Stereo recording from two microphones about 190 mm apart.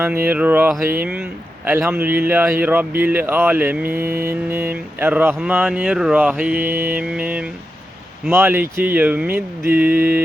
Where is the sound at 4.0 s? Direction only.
50° right (ahead or behind).